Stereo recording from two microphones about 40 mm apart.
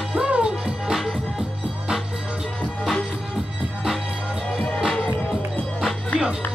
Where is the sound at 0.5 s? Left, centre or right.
Centre.